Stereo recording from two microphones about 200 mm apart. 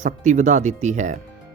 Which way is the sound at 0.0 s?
40° right (ahead or behind).